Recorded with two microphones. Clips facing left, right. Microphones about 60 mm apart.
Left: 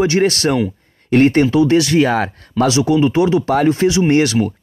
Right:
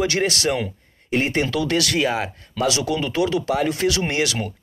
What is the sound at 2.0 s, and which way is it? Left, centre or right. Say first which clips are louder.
Speech: left 6 dB; left.